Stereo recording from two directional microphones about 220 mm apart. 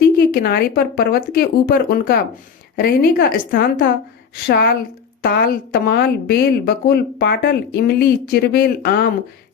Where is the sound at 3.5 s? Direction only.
40° left (ahead or behind).